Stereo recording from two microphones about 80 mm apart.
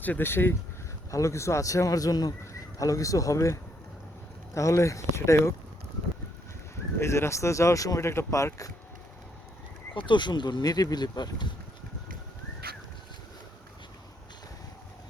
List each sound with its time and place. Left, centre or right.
0.0 s speech: left
1.1 s speech: left
7.0 s speech: left
9.9 s speech: left